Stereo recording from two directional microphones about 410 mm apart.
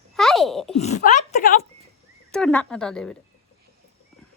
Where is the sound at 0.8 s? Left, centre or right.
Centre.